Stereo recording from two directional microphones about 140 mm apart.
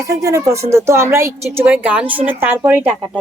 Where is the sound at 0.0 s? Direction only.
25° right (ahead or behind).